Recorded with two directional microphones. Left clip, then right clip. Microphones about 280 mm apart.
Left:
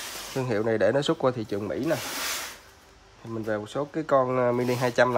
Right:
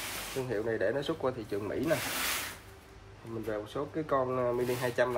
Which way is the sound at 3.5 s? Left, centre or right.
Left.